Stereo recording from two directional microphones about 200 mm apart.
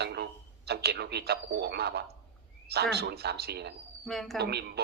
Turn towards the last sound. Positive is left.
turn(degrees=-55)  # may be behind; listen again after turning